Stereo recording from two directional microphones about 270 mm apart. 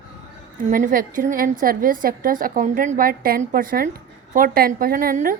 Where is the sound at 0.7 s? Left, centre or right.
Right.